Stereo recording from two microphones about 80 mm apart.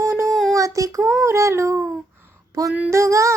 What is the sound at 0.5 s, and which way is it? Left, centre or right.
Child singing, right.